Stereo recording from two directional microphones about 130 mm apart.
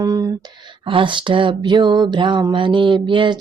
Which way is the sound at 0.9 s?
40° right (ahead or behind).